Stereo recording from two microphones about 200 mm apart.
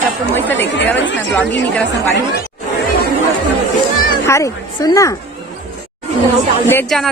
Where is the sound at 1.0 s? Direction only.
65° left (ahead or behind).